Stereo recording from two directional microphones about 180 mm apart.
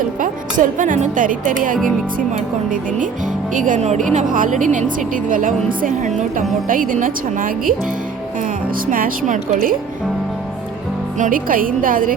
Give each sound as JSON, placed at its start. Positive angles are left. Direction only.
{"t": 0.2, "sound": "speech", "side_deg": -45}
{"t": 3.5, "sound": "speech", "side_deg": -45}
{"t": 8.9, "sound": "speech", "side_deg": -50}
{"t": 11.2, "sound": "speech", "side_deg": -50}